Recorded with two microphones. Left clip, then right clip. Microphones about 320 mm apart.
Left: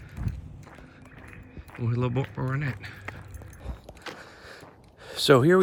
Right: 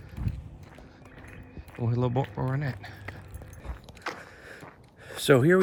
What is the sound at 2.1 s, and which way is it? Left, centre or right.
Speech, right.